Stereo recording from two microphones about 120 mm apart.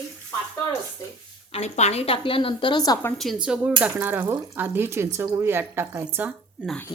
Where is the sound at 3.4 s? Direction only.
10° right (ahead or behind).